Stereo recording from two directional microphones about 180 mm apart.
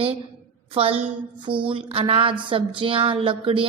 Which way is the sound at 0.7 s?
30° right (ahead or behind).